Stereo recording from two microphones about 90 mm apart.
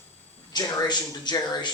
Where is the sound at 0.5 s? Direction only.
55° left (ahead or behind).